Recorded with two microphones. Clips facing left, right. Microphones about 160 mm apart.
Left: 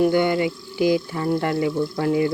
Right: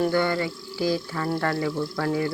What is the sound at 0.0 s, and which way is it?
Speech, 20° left (ahead or behind).